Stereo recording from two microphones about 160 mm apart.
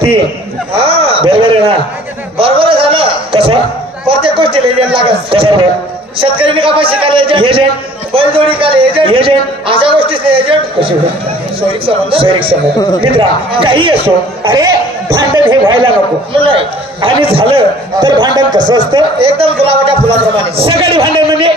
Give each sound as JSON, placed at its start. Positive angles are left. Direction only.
{"t": 0.7, "sound": "speech", "side_deg": -35}
{"t": 2.3, "sound": "a sound", "side_deg": -35}
{"t": 4.1, "sound": "a man's voice", "side_deg": -35}